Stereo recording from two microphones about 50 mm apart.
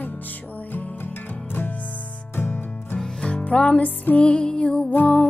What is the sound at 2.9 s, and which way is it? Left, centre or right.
Music, centre.